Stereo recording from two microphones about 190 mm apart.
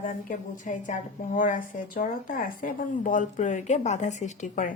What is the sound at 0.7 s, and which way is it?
A woman's voice, 40° left (ahead or behind).